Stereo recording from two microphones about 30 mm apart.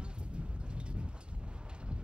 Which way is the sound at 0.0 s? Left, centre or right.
Right.